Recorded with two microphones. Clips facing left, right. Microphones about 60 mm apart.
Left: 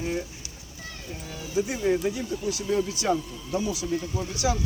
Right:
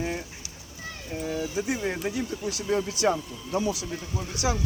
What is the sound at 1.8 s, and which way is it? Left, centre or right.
Speech, right.